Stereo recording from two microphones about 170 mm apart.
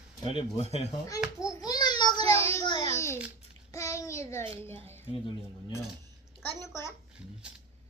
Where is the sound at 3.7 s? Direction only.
20° left (ahead or behind).